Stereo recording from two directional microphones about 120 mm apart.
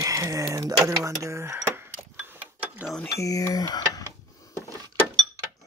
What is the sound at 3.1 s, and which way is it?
Speech, 25° left (ahead or behind).